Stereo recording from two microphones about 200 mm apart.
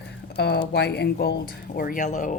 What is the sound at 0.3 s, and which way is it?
A woman's voice, 55° left (ahead or behind).